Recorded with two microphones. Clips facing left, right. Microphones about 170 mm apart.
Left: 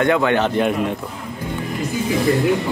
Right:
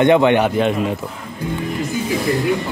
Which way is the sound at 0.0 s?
20° right (ahead or behind).